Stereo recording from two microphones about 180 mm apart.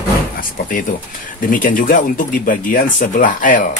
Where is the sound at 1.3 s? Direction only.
50° left (ahead or behind).